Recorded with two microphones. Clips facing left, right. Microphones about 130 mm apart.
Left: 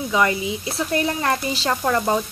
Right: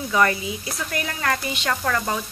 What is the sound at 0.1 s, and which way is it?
Speech, 20° left (ahead or behind).